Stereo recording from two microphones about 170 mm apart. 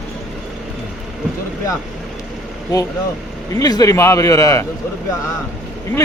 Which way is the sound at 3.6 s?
20° left (ahead or behind).